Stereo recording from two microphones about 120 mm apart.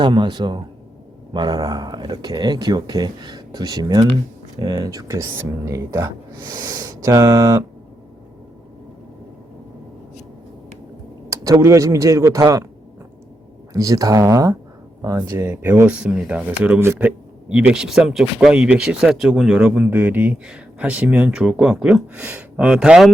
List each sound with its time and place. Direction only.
0.0 s speech: 40° right (ahead or behind)
11.3 s speech: 30° right (ahead or behind)
13.7 s speech: 30° right (ahead or behind); by 23.1 s 5° right (ahead or behind)